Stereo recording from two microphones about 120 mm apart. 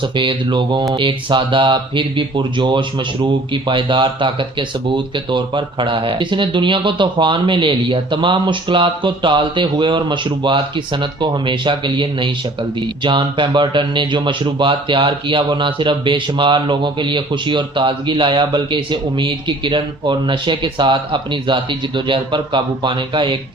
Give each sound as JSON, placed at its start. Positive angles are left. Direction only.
{"t": 0.0, "sound": "speech", "side_deg": -40}